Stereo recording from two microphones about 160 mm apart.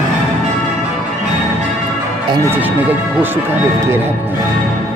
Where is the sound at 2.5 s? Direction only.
10° right (ahead or behind).